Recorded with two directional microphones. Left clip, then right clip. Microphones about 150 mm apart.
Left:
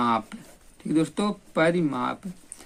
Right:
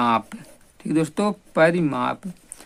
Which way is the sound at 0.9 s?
45° right (ahead or behind).